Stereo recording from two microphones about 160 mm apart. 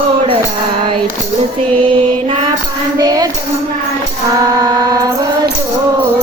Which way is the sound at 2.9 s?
25° right (ahead or behind).